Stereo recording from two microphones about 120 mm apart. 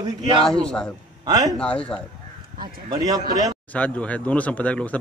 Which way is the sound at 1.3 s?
30° right (ahead or behind).